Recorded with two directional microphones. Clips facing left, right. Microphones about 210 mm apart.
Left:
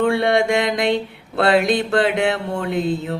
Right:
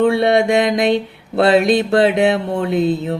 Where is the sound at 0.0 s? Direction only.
20° right (ahead or behind).